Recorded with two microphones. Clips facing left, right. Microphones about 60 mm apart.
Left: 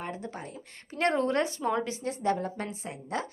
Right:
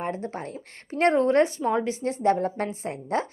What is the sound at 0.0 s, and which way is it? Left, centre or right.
Speech, right.